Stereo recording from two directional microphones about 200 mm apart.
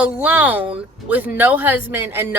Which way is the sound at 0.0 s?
5° right (ahead or behind).